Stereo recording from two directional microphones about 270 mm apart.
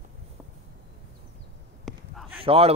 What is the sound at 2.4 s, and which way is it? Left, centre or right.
Speech, right.